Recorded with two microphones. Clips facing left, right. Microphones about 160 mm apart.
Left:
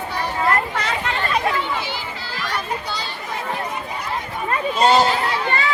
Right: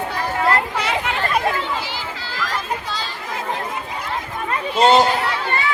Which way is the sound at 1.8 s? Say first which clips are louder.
Even; 90° right.